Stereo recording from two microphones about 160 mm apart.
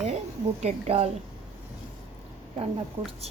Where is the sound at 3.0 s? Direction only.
40° right (ahead or behind).